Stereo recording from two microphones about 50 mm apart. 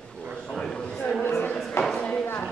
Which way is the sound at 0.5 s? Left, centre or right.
Centre.